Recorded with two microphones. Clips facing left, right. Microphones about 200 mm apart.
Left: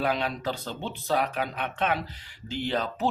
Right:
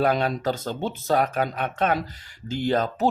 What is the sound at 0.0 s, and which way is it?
Speech, 45° right (ahead or behind).